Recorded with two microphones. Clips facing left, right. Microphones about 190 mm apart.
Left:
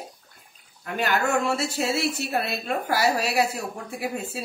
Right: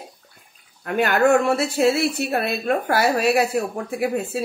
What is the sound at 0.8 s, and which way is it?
Speech, 55° right (ahead or behind).